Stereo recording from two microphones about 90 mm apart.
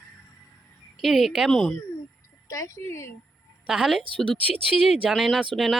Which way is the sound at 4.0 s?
70° right (ahead or behind).